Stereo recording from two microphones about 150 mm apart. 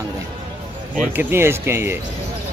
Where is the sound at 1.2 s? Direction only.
15° right (ahead or behind).